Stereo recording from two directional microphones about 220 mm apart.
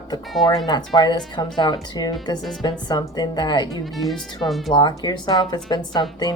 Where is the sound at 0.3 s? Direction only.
Centre (ahead or behind).